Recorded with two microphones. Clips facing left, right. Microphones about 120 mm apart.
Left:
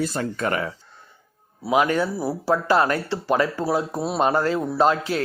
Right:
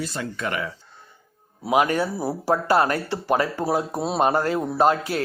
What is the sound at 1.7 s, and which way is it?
Speech, 45° right (ahead or behind).